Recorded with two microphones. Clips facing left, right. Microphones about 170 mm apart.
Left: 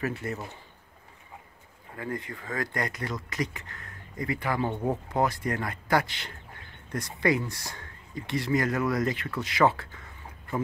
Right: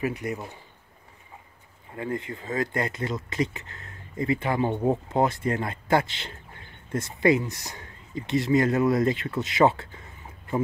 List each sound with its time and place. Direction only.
0.0 s speech: 15° right (ahead or behind)
2.0 s speech: 25° right (ahead or behind)